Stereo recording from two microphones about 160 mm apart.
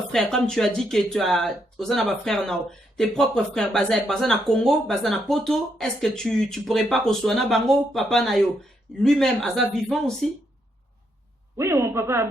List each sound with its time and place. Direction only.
0.1 s speech: centre (ahead or behind)
11.5 s speech: 15° right (ahead or behind)